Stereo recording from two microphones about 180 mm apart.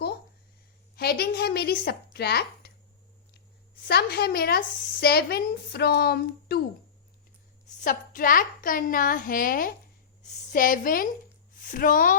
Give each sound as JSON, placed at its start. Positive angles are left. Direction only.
{"t": 0.9, "sound": "speech", "side_deg": 60}
{"t": 2.1, "sound": "a sound", "side_deg": 65}
{"t": 3.8, "sound": "speech", "side_deg": 60}
{"t": 7.7, "sound": "a woman's voice", "side_deg": 45}